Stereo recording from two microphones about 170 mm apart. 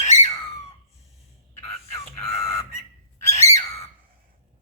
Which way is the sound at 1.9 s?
15° left (ahead or behind).